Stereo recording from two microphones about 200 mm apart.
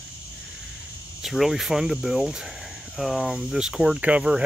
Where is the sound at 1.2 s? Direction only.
Centre (ahead or behind).